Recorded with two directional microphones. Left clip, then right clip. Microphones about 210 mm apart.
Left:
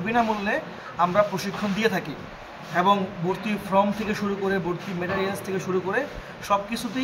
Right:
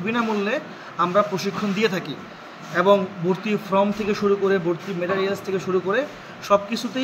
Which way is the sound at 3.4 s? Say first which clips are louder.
Right 1 dB; 10° left (ahead or behind).